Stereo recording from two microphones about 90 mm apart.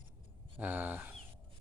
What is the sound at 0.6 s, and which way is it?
Speech, 20° right (ahead or behind).